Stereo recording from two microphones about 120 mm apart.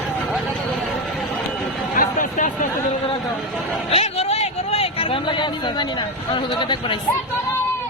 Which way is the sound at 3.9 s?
60° left (ahead or behind).